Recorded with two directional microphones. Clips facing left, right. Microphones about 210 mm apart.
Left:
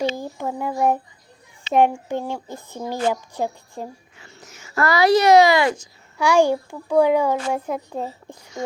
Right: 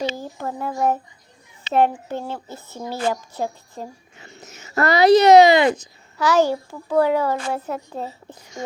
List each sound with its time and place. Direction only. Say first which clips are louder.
0.2 s a child's voice: left 2 dB; 15° left (ahead or behind)
4.2 s speech: right 3 dB; 20° right (ahead or behind)
6.1 s a child's voice: left 1 dB; 15° left (ahead or behind)